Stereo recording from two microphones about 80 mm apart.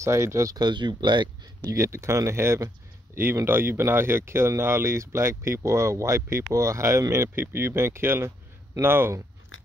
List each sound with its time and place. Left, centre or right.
0.0 s speech: right
0.6 s speech: right
1.7 s speech: right